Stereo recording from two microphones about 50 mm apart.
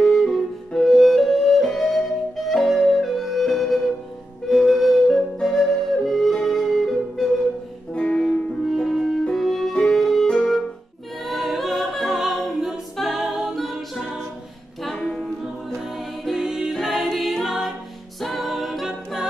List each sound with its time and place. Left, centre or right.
0.0 s flute: centre
7.9 s music: left
8.6 s music: centre
11.2 s music: centre
12.9 s a capella: centre
15.0 s music: centre
15.8 s music: centre
18.2 s a capella: centre